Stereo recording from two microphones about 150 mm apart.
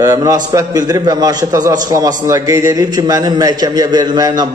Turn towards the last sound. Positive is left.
turn(degrees=-25)  # may be behind; listen again after turning